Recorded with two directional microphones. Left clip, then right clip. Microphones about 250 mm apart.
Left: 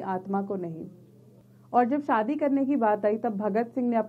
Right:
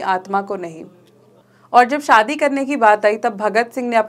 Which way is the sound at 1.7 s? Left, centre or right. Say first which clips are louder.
Right 12 dB; centre.